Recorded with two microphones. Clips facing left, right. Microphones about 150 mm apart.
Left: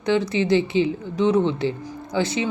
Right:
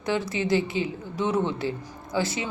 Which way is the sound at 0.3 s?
25° left (ahead or behind).